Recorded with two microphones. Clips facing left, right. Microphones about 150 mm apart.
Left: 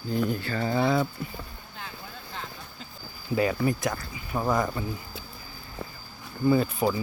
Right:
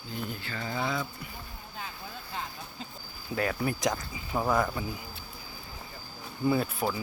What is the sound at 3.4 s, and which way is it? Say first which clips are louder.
Speech: left 5 dB; centre (ahead or behind).